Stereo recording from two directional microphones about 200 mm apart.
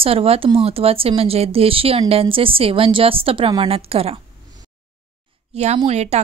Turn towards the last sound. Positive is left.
turn(degrees=-35)  # may be behind; listen again after turning